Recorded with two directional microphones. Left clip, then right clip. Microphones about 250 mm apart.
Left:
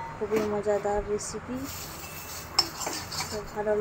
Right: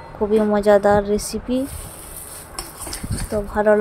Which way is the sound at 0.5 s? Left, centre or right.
Right.